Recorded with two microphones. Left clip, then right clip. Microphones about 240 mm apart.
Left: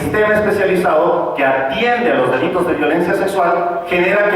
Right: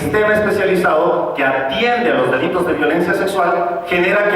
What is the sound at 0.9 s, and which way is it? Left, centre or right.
Speech, right.